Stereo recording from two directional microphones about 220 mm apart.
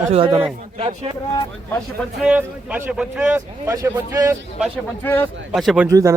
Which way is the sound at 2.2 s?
5° right (ahead or behind).